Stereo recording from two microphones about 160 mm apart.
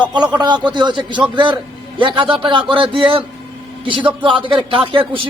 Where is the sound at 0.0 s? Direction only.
30° right (ahead or behind).